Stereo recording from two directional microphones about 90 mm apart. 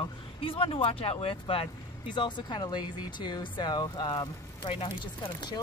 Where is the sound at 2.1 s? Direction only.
60° left (ahead or behind).